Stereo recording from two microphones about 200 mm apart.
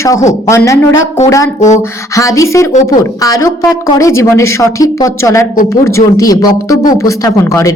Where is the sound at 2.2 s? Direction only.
15° left (ahead or behind).